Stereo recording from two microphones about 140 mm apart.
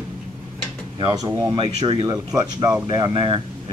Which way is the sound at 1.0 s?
30° right (ahead or behind).